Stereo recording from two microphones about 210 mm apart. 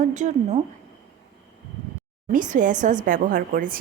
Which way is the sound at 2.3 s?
35° right (ahead or behind).